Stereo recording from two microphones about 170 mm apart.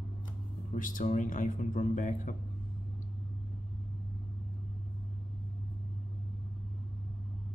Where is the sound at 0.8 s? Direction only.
50° left (ahead or behind).